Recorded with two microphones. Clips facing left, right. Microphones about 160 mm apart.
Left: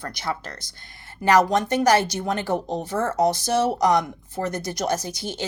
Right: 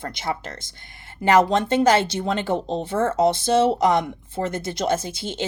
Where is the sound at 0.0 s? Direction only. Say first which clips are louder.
Right 2 dB; 20° right (ahead or behind).